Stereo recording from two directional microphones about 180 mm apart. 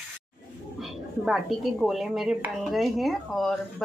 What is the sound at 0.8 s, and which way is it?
Speech, centre (ahead or behind).